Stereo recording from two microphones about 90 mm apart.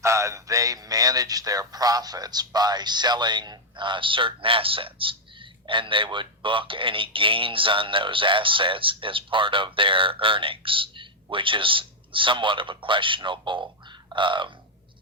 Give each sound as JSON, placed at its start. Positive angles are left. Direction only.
{"t": 0.0, "sound": "speech", "side_deg": -35}
{"t": 14.1, "sound": "bird", "side_deg": -65}